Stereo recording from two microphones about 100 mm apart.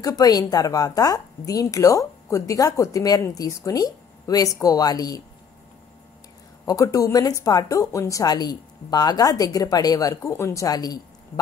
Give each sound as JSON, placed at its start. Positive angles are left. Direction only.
{"t": 0.0, "sound": "a woman's voice", "side_deg": 40}
{"t": 6.6, "sound": "a woman's voice", "side_deg": 35}